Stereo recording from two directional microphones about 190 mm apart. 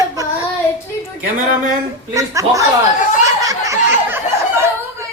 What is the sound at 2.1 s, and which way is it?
Speech, 15° right (ahead or behind).